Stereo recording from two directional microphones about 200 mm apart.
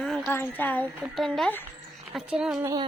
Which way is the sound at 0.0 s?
Centre (ahead or behind).